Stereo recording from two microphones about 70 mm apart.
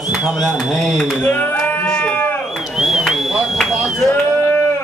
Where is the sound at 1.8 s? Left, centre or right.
Centre.